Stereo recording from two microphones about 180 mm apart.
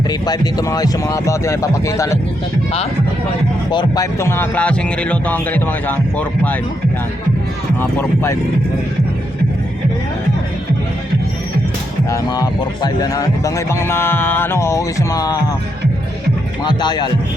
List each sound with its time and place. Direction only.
0.1 s speech: 20° left (ahead or behind)
3.7 s speech: 25° left (ahead or behind)
7.8 s speech: 15° left (ahead or behind)
12.1 s speech: 20° left (ahead or behind)
16.6 s speech: 25° left (ahead or behind)